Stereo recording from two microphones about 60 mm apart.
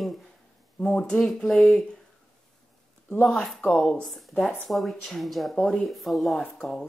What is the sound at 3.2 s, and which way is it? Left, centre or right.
Speech, centre.